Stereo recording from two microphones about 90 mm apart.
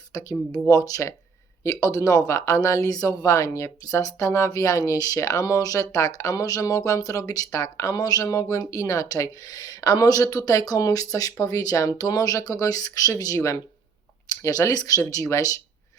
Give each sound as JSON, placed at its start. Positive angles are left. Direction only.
{"t": 0.1, "sound": "speech", "side_deg": 40}